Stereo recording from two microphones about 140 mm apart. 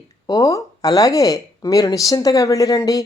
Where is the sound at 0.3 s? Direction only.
25° left (ahead or behind).